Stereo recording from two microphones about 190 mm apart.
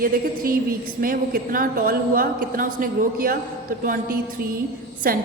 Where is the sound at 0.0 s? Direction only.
50° right (ahead or behind).